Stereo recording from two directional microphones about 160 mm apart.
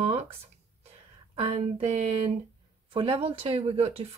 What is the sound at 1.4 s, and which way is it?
Speech, 40° right (ahead or behind).